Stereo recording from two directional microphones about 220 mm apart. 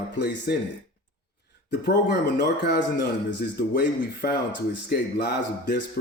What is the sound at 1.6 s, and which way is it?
Speech, 50° left (ahead or behind).